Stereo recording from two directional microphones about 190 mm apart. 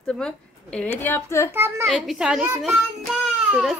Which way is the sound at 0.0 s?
5° left (ahead or behind).